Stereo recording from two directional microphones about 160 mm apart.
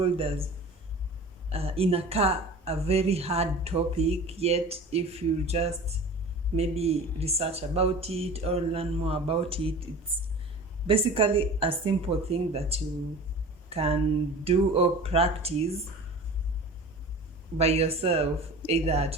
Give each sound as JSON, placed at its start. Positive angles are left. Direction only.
{"t": 0.0, "sound": "a woman's voice", "side_deg": -35}
{"t": 1.5, "sound": "a woman's voice", "side_deg": -40}
{"t": 17.6, "sound": "a woman's voice", "side_deg": -40}